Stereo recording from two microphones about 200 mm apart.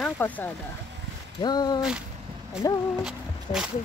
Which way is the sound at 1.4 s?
20° left (ahead or behind).